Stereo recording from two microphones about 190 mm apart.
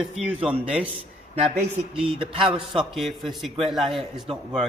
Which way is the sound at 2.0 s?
30° right (ahead or behind).